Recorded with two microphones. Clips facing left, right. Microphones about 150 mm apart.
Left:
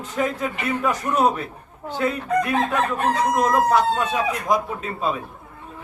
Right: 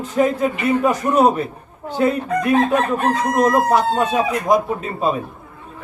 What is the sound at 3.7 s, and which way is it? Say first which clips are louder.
Speech: right 2 dB; 20° right (ahead or behind).